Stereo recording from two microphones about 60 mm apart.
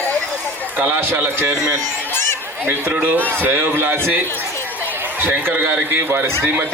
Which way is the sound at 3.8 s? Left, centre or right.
Right.